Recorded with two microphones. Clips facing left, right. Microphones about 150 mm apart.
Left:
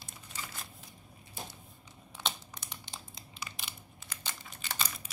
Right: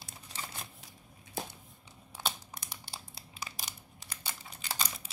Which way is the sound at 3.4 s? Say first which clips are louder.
Right 1 dB; 40° right (ahead or behind).